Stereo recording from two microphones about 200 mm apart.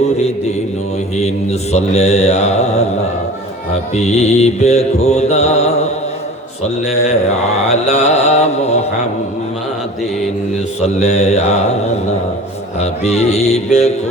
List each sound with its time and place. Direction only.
1.1 s mantra: 35° left (ahead or behind)
3.9 s mantra: 35° left (ahead or behind)
10.8 s mantra: 35° left (ahead or behind)
12.8 s mantra: 35° left (ahead or behind)